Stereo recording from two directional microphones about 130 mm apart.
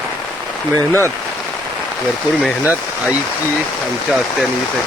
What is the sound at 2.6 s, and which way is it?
Speech, 10° right (ahead or behind).